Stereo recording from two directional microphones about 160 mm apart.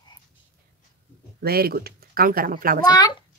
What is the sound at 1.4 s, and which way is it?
Speech, 70° right (ahead or behind).